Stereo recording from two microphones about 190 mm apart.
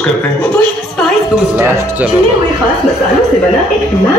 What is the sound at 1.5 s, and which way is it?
Speech, 10° right (ahead or behind).